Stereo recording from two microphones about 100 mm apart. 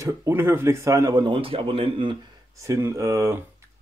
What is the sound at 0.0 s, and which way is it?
Speech, 30° right (ahead or behind).